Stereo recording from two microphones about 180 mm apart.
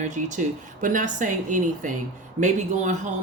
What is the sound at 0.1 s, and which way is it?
Speech, 45° right (ahead or behind).